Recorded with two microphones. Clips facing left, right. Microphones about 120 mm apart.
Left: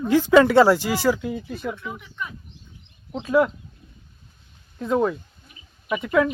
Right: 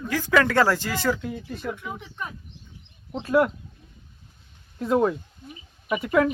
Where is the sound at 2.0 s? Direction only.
40° right (ahead or behind).